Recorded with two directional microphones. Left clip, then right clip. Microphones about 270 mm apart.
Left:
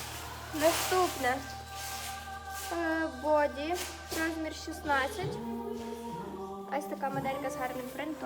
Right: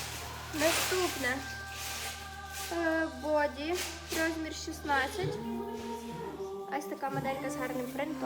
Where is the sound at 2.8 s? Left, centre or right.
Centre.